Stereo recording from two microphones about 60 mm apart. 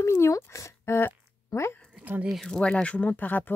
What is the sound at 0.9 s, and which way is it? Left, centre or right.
Speech, left.